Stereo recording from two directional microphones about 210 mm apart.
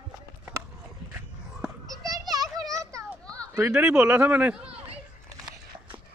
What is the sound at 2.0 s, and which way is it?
Children playing, 15° right (ahead or behind).